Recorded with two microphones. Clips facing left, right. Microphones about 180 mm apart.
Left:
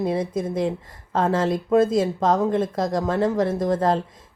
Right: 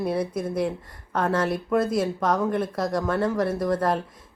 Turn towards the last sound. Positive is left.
turn(degrees=25)  # may be behind; listen again after turning